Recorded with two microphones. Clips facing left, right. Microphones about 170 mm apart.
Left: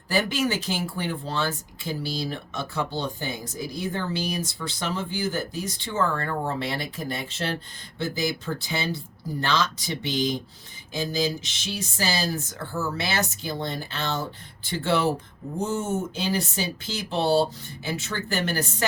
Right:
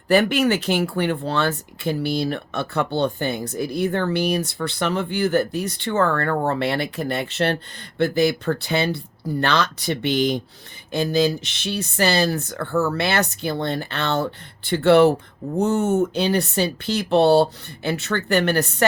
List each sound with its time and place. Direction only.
0.1 s speech: 65° right (ahead or behind)